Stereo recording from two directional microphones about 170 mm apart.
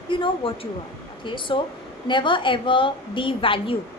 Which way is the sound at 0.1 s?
30° left (ahead or behind).